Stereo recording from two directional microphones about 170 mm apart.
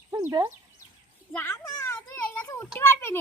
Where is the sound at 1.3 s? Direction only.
10° left (ahead or behind).